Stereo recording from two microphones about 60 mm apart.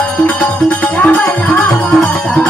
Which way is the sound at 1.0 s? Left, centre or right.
Left.